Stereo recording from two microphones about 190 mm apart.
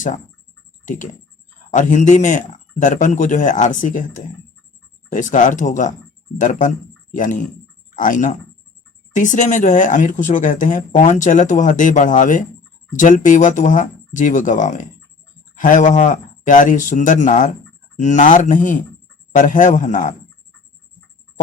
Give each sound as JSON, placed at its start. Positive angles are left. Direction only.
{"t": 1.7, "sound": "speech", "side_deg": 40}